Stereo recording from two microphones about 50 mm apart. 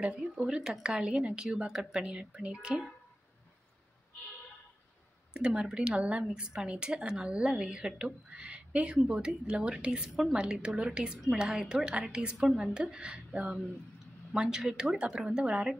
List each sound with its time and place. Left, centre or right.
0.2 s a woman's voice: centre
5.3 s a woman's voice: centre
12.4 s speech: centre
12.7 s a woman's voice: centre